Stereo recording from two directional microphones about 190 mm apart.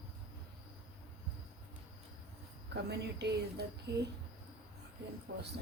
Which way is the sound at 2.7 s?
60° right (ahead or behind).